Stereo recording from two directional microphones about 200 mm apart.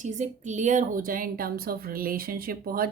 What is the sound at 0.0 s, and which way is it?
A woman's voice, 35° right (ahead or behind).